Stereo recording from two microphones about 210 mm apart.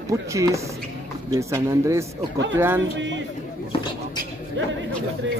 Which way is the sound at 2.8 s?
60° right (ahead or behind).